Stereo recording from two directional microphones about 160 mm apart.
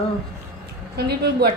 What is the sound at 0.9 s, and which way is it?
Speech, 90° right.